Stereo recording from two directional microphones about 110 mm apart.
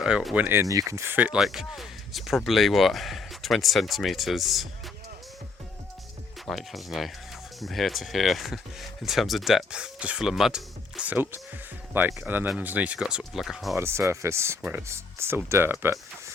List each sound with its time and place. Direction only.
0.0 s speech: 5° right (ahead or behind)
0.3 s speech: 20° right (ahead or behind)
0.6 s speech: 30° right (ahead or behind)
1.4 s speech: centre (ahead or behind)
6.4 s speech: centre (ahead or behind)
13.7 s speech: 25° right (ahead or behind)